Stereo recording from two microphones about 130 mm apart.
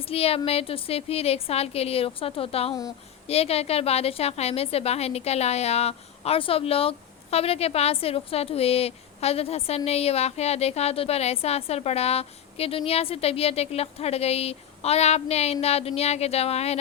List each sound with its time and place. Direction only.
0.1 s a woman's voice: 50° left (ahead or behind)